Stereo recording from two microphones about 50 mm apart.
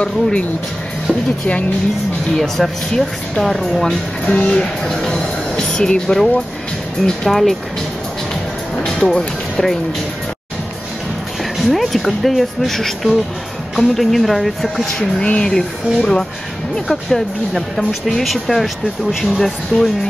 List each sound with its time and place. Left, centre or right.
0.0 s speech: left
2.3 s speech: centre
4.3 s speech: left; by 7.5 s centre
8.8 s speech: centre
11.6 s speech: centre
15.2 s speech: left
16.8 s speech: centre